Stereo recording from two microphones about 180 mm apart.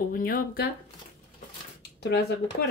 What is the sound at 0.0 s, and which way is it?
Speech, 50° left (ahead or behind).